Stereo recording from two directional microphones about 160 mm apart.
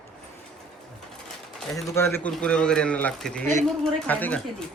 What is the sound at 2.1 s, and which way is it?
A woman's voice, 5° left (ahead or behind).